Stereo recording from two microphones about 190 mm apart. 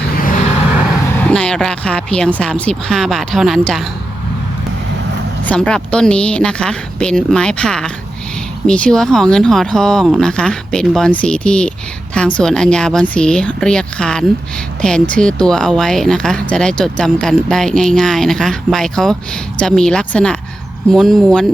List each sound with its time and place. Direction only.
1.2 s speech: 5° left (ahead or behind)
5.5 s speech: 5° left (ahead or behind)